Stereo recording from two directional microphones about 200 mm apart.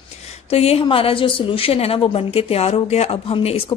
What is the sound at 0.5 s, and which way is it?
A woman's voice, 30° left (ahead or behind).